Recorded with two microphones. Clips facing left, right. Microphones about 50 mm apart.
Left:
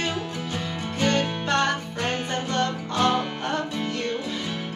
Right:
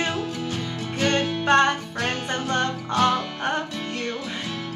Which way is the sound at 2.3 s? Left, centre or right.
Right.